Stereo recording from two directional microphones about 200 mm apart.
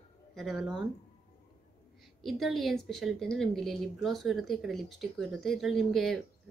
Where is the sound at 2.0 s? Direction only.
Centre (ahead or behind).